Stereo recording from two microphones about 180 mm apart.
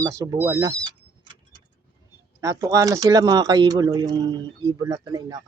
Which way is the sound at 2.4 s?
20° right (ahead or behind).